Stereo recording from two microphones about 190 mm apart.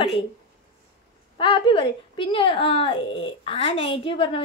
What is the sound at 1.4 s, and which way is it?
Speech, 25° left (ahead or behind).